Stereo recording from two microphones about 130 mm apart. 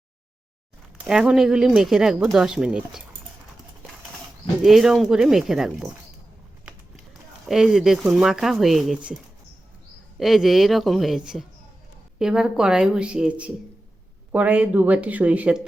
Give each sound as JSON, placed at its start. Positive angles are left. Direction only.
{"t": 1.0, "sound": "speech", "side_deg": -5}
{"t": 4.6, "sound": "speech", "side_deg": 0}
{"t": 10.2, "sound": "a woman's voice", "side_deg": 0}